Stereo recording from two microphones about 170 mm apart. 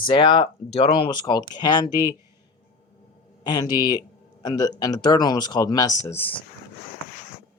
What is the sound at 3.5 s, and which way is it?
Speech, 25° left (ahead or behind).